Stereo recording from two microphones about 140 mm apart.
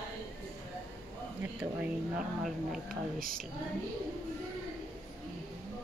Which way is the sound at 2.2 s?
Centre (ahead or behind).